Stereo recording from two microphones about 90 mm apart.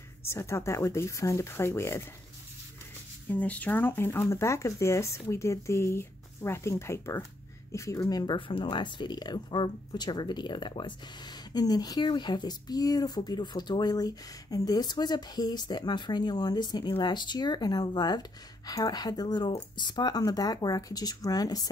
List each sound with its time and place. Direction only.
0.2 s speech: 30° left (ahead or behind)
3.3 s speech: 15° left (ahead or behind); by 8.4 s 50° left (ahead or behind)
8.4 s speech: 70° left (ahead or behind); by 21.6 s 45° left (ahead or behind)